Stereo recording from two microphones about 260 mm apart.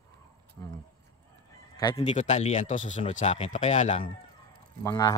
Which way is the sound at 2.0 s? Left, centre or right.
Left.